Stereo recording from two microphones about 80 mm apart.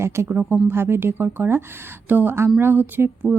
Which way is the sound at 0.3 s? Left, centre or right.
Right.